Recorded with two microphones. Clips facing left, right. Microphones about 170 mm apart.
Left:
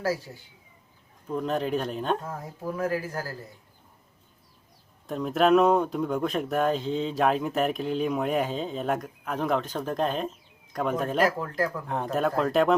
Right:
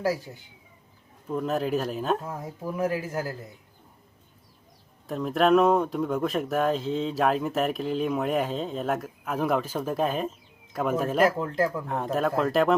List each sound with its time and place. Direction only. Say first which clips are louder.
1.3 s speech: right 1 dB; 5° right (ahead or behind)
2.2 s speech: even; 20° right (ahead or behind)
5.0 s speech: even; centre (ahead or behind)
11.3 s speech: right 3 dB; 25° right (ahead or behind)
11.9 s speech: even; centre (ahead or behind)